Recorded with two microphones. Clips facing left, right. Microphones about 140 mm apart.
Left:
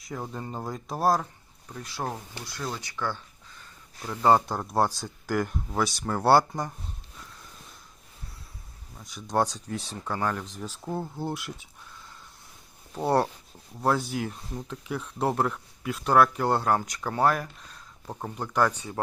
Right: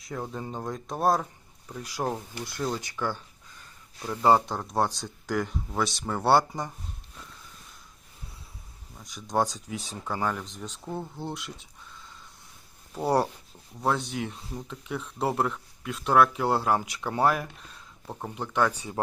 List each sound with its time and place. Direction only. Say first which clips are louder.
0.0 s speech: right 1 dB; centre (ahead or behind)
2.4 s speech: right 5 dB; 20° right (ahead or behind); by 6.7 s centre (ahead or behind)
9.3 s speech: left 1 dB; centre (ahead or behind)
13.1 s speech: left 1 dB; 5° right (ahead or behind)
18.7 s speech: even; 10° right (ahead or behind)